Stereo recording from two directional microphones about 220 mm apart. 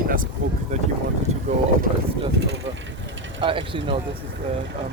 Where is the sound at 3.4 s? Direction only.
25° right (ahead or behind).